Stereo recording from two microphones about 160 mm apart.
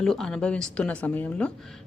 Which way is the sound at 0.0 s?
5° left (ahead or behind).